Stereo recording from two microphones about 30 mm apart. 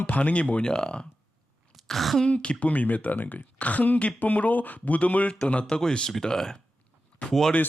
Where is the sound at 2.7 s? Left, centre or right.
Left.